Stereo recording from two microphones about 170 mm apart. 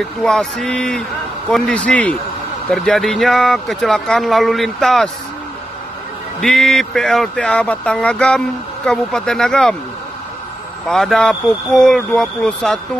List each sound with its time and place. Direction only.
0.2 s speech: 5° left (ahead or behind)
6.4 s speech: centre (ahead or behind)
10.9 s speech: 5° left (ahead or behind)